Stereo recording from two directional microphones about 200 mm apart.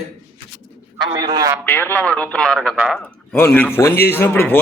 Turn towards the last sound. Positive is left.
turn(degrees=10)  # may be behind; listen again after turning